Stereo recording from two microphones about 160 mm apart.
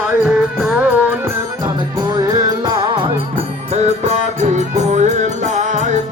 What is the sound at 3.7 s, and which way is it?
Music, 45° right (ahead or behind).